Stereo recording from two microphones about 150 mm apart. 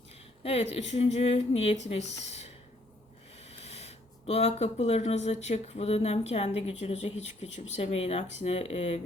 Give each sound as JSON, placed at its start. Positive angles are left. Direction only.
{"t": 0.4, "sound": "speech", "side_deg": 45}
{"t": 3.5, "sound": "speech", "side_deg": 45}